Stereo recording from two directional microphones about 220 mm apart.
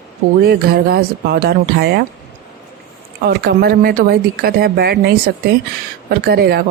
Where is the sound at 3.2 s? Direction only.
45° right (ahead or behind).